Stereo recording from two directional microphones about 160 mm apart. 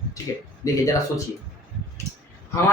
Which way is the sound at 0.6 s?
20° left (ahead or behind).